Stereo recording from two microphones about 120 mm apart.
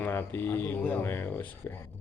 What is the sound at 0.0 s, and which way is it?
Speech, 15° left (ahead or behind).